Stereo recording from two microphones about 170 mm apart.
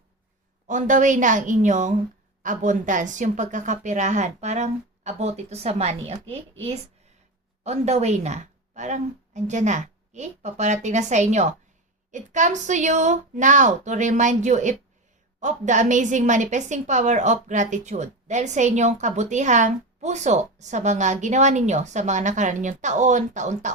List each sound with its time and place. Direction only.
0.7 s a woman's voice: 50° right (ahead or behind)
7.6 s a woman's voice: 40° right (ahead or behind)